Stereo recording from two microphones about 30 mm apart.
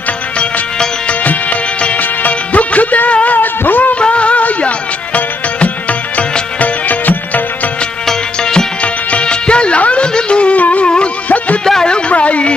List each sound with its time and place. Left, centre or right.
1.2 s music: left
3.3 s music: left
4.0 s music: left
6.6 s music: left
8.1 s music: left
9.2 s music: left
9.8 s a sound: left
10.0 s music: left
10.5 s music: left
11.2 s a sound: left
11.6 s music: centre
12.1 s a sound: left